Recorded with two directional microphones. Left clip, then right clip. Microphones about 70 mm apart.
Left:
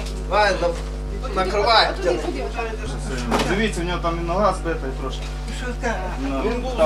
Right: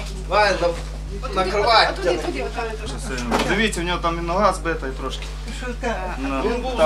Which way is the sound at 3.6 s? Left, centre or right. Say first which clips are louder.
Right 2 dB; right.